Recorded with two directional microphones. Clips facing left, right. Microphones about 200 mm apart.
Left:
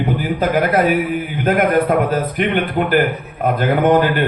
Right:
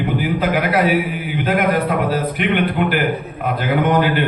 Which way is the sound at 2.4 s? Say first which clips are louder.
Even; 45° left (ahead or behind).